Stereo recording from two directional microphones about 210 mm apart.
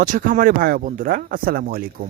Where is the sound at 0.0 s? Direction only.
40° right (ahead or behind).